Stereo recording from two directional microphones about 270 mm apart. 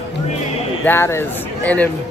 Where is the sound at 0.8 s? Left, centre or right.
Centre.